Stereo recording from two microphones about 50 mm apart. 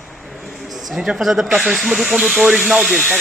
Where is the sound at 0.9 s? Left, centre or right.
Centre.